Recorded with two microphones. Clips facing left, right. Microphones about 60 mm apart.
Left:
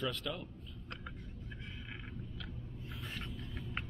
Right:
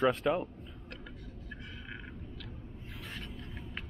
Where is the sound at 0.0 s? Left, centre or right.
Right.